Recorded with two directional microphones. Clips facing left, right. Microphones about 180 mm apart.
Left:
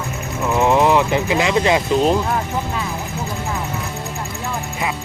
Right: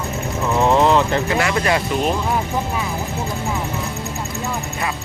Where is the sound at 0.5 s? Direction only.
15° left (ahead or behind).